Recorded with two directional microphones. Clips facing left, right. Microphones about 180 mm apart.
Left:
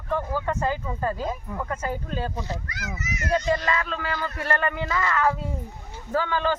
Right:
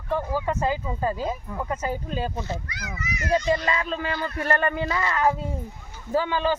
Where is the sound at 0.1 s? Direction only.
10° right (ahead or behind).